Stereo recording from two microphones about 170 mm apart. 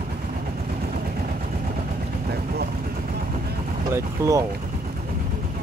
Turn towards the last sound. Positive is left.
turn(degrees=-20)  # may be behind; listen again after turning